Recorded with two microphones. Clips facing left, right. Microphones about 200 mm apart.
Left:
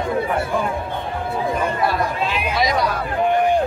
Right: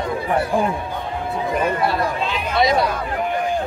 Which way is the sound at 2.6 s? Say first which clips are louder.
Right 3 dB; 30° right (ahead or behind).